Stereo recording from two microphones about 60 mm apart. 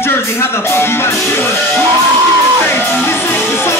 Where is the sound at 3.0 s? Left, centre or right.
Left.